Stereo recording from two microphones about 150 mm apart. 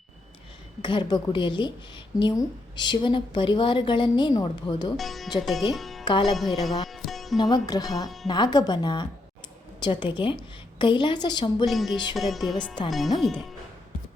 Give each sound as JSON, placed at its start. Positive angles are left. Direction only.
{"t": 0.8, "sound": "a woman's voice", "side_deg": 30}
{"t": 4.9, "sound": "speech", "side_deg": 0}
{"t": 7.3, "sound": "a woman's voice", "side_deg": 25}
{"t": 11.6, "sound": "speech", "side_deg": 0}